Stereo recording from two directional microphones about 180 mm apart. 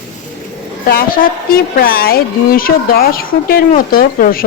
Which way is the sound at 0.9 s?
55° left (ahead or behind).